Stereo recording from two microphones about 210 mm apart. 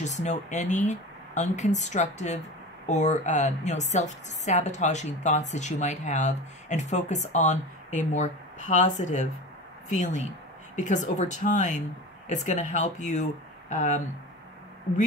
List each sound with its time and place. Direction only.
0.0 s a woman's voice: 35° left (ahead or behind)